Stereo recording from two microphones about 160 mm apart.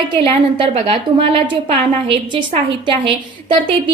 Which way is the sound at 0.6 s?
35° right (ahead or behind).